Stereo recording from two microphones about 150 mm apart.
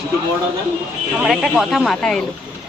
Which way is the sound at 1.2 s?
Centre (ahead or behind).